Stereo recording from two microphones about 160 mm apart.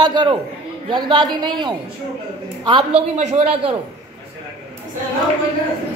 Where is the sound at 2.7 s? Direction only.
40° right (ahead or behind).